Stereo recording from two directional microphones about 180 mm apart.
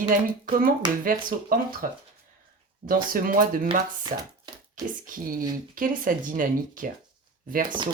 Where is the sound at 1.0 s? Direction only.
50° right (ahead or behind).